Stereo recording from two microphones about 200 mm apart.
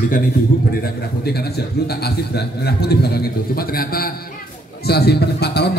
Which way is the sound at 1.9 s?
55° left (ahead or behind).